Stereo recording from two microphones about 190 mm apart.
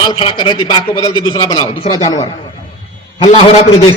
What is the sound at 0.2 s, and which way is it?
A man's voice, 25° left (ahead or behind).